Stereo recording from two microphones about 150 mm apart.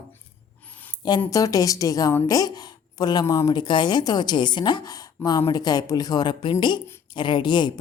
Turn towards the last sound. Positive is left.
turn(degrees=30)  # may be behind; listen again after turning